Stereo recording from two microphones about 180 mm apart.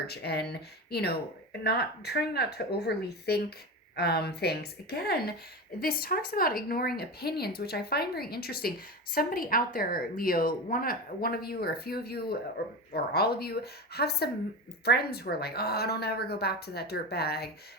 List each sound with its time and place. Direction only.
0.1 s a woman's voice: 65° left (ahead or behind)